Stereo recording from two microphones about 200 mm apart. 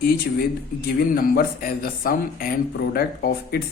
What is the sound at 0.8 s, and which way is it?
A man's voice, 50° left (ahead or behind).